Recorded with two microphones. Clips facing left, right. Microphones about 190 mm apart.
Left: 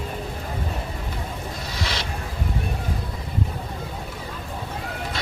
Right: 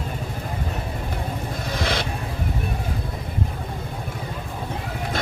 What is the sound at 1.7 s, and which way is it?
Vehicle, 50° right (ahead or behind).